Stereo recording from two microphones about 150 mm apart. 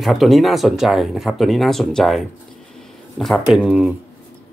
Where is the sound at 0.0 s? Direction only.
Centre (ahead or behind).